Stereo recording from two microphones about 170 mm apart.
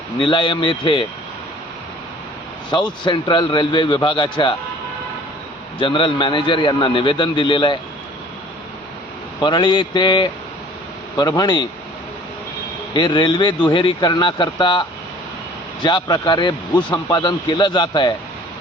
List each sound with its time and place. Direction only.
0.2 s speech: 30° left (ahead or behind)
2.6 s speech: 25° left (ahead or behind)
5.8 s speech: 30° left (ahead or behind)
9.4 s speech: 25° left (ahead or behind)
12.9 s speech: 25° left (ahead or behind)